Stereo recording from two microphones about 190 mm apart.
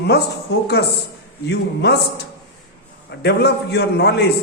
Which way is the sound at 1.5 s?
60° left (ahead or behind).